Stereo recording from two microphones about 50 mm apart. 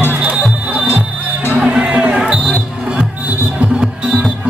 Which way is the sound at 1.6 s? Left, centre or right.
Centre.